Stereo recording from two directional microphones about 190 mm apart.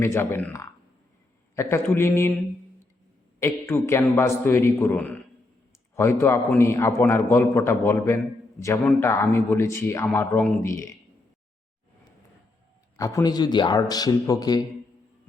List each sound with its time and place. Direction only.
0.0 s a man's voice: 10° left (ahead or behind)
3.4 s a man's voice: 15° left (ahead or behind)
13.0 s speech: 15° left (ahead or behind)